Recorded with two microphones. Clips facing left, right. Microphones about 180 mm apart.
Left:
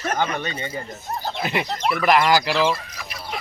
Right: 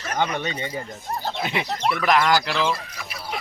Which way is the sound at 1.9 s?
Centre (ahead or behind).